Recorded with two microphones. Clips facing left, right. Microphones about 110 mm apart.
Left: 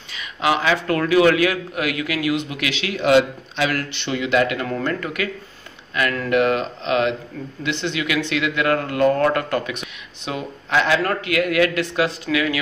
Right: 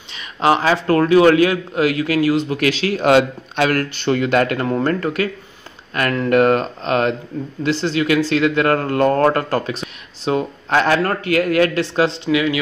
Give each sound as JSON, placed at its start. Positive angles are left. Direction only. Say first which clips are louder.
{"t": 0.1, "sound": "a man's voice", "louder": "right 4 dB", "side_deg": -30}